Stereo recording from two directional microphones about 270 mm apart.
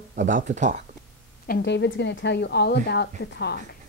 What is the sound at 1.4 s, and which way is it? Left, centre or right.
A woman's voice, left.